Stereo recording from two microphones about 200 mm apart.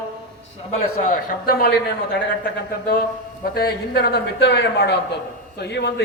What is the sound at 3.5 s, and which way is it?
A man's voice, 50° left (ahead or behind).